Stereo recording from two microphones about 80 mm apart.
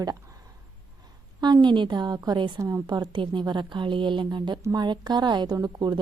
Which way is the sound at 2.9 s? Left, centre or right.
Right.